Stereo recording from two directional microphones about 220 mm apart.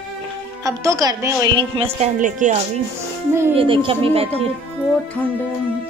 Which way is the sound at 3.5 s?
25° right (ahead or behind).